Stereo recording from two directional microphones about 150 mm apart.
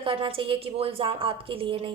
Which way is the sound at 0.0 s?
35° right (ahead or behind).